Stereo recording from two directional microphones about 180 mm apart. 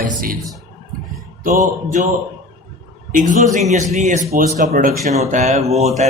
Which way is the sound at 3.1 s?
45° right (ahead or behind).